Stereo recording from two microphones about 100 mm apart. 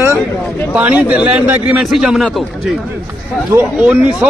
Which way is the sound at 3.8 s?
10° right (ahead or behind).